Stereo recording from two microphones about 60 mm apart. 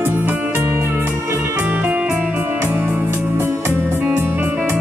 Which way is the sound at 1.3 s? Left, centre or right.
Right.